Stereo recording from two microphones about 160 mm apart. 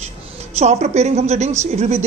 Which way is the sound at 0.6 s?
45° right (ahead or behind).